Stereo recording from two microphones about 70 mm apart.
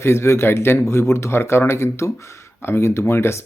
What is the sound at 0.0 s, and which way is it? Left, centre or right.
A man's voice, left.